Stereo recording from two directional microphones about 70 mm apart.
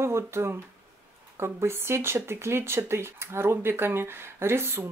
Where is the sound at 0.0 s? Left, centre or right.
Right.